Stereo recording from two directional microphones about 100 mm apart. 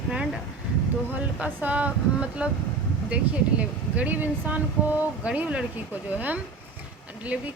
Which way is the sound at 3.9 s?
15° right (ahead or behind).